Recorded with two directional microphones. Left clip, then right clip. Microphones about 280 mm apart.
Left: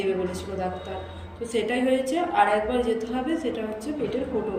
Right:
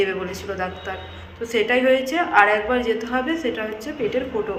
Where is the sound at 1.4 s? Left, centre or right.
Centre.